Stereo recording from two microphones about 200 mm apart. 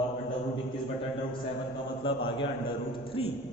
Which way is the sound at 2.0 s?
25° left (ahead or behind).